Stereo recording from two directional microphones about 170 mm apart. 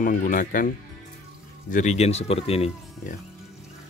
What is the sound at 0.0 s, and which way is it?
Speech, 50° left (ahead or behind).